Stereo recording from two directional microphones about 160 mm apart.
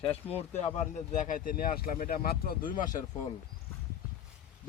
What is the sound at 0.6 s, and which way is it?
Speech, 45° left (ahead or behind).